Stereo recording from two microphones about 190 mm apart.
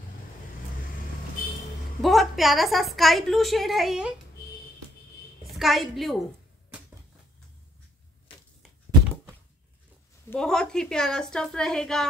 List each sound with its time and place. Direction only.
2.0 s a woman's voice: centre (ahead or behind)
5.5 s a woman's voice: centre (ahead or behind)
10.3 s a woman's voice: 5° left (ahead or behind)